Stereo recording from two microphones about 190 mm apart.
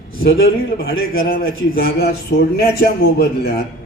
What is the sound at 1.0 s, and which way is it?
A man's voice, 55° left (ahead or behind).